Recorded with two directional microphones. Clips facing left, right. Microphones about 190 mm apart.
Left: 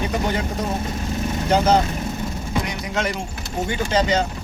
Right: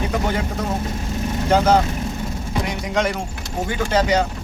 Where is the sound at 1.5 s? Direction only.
15° left (ahead or behind).